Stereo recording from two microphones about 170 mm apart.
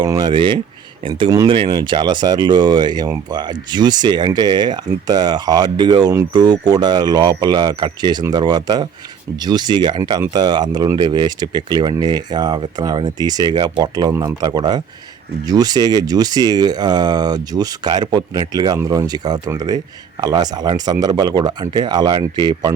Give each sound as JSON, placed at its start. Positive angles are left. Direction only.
{"t": 0.0, "sound": "speech", "side_deg": -25}